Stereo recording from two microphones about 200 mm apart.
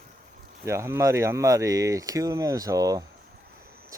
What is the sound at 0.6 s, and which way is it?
Speech, 15° right (ahead or behind).